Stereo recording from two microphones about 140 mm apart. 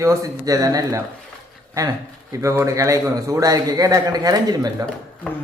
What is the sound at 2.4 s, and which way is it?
A man's voice, 20° right (ahead or behind).